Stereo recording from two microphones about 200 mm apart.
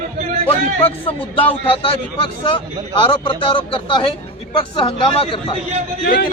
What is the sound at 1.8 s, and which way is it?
Speech, 25° left (ahead or behind).